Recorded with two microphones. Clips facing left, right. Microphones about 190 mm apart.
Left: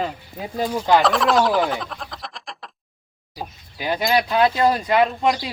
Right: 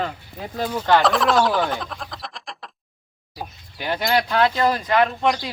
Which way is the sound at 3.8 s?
10° left (ahead or behind).